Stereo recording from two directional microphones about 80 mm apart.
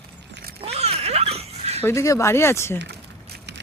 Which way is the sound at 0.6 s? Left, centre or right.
Right.